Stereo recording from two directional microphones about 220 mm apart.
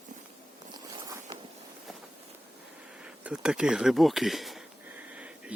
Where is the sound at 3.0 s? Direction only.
5° right (ahead or behind).